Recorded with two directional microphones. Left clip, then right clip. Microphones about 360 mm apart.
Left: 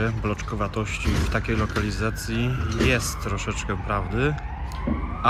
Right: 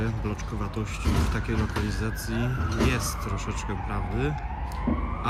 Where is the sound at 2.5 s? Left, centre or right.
Right.